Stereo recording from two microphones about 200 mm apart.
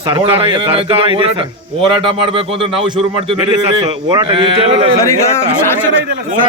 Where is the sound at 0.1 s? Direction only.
25° right (ahead or behind).